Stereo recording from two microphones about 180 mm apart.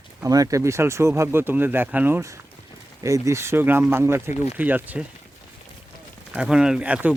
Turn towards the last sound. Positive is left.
turn(degrees=-10)  # may be behind; listen again after turning